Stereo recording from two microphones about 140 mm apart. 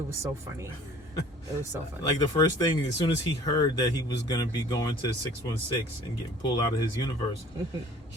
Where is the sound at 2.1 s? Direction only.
25° left (ahead or behind).